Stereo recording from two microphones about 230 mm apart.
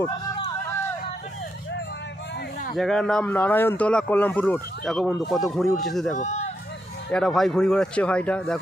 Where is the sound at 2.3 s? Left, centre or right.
Left.